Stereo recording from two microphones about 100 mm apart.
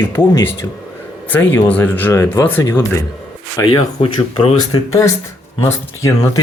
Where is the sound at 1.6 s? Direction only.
20° left (ahead or behind).